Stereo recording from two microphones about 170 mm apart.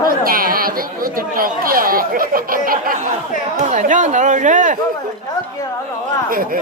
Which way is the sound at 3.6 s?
45° right (ahead or behind).